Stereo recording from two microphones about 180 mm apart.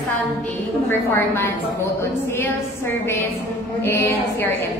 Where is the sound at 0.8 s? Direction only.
15° left (ahead or behind).